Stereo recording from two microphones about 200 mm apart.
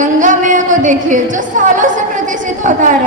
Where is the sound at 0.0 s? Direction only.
40° right (ahead or behind).